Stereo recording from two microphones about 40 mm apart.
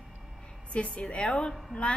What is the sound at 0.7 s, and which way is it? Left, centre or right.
A woman's voice, left.